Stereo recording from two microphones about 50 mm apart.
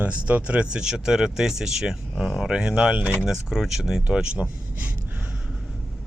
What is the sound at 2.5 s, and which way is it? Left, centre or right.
Speech, centre.